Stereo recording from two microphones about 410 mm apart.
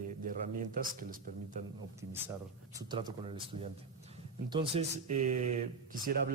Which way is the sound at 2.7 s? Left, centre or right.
Centre.